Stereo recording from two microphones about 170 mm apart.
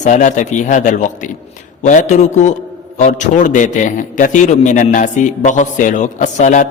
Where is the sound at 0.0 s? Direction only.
45° left (ahead or behind).